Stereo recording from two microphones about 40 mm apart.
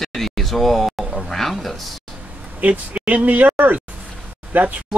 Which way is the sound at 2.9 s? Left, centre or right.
Right.